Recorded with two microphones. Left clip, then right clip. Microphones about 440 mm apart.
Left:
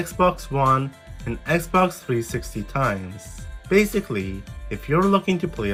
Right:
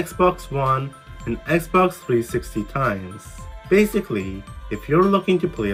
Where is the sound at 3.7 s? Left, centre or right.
Centre.